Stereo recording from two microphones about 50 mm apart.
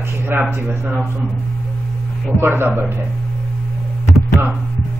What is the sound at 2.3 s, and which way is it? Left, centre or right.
Speech, right.